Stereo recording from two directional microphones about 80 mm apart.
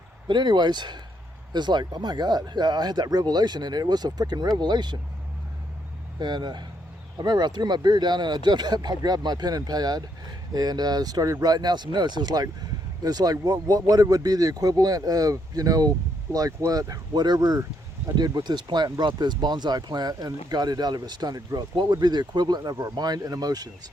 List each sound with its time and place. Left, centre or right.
0.3 s speech: right
6.1 s speech: right